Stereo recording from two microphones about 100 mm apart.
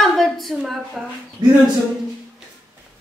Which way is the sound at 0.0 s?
Centre (ahead or behind).